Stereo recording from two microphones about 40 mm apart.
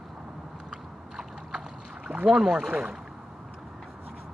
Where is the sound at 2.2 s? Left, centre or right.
Centre.